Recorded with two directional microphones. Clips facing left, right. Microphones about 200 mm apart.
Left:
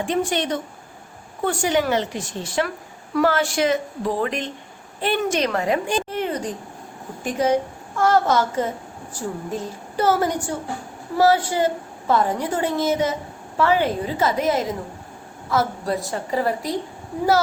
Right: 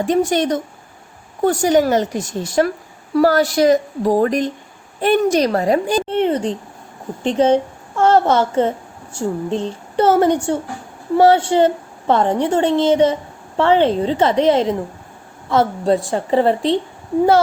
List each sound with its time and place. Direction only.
0.0 s a woman's voice: 40° right (ahead or behind); by 16.8 s 25° right (ahead or behind)